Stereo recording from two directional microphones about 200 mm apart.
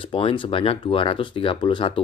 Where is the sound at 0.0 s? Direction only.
25° left (ahead or behind).